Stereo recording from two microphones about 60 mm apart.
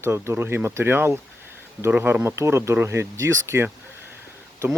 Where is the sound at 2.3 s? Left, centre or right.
Right.